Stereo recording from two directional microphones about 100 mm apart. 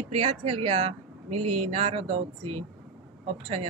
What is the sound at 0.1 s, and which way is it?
Speech, 75° right (ahead or behind).